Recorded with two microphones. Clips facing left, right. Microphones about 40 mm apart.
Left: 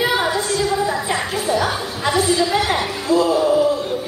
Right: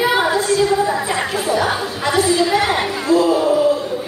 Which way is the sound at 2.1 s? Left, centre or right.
Right.